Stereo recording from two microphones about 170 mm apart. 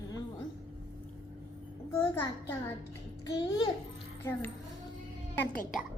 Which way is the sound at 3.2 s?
25° left (ahead or behind).